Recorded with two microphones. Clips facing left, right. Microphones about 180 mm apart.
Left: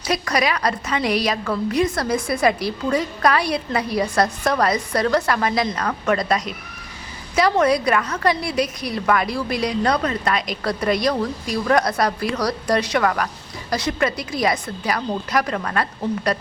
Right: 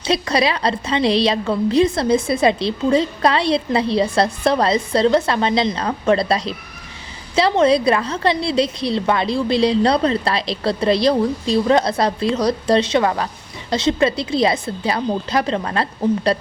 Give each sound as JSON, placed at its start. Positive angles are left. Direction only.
{"t": 0.0, "sound": "a woman's voice", "side_deg": -25}